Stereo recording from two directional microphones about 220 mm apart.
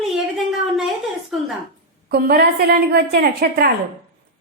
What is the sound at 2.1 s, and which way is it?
A woman's voice, 45° right (ahead or behind).